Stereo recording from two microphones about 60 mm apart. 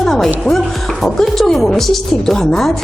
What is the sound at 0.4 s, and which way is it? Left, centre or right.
A woman's voice, centre.